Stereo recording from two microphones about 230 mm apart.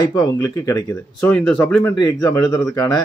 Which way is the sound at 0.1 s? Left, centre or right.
Centre.